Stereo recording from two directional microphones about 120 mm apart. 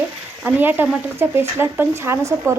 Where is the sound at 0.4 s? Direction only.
15° right (ahead or behind).